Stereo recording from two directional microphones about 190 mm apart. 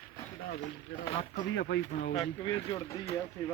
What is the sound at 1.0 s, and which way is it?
Speech, 30° left (ahead or behind).